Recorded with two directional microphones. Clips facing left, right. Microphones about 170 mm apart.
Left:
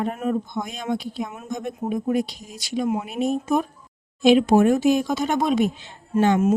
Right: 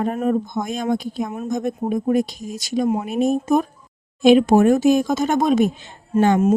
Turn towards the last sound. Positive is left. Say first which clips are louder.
# right 2 dB
turn(degrees=-45)  # may be behind; listen again after turning